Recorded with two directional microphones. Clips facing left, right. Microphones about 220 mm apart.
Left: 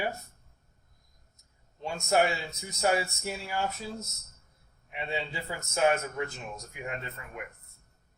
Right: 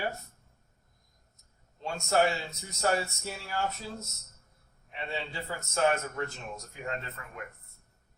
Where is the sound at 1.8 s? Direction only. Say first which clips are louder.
Left 1 dB; 15° left (ahead or behind).